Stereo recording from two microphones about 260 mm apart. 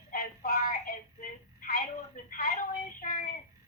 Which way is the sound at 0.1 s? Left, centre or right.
Left.